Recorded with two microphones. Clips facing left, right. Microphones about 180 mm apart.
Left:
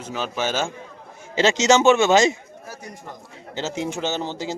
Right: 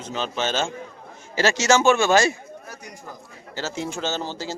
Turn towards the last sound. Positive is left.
turn(degrees=20)  # may be behind; listen again after turning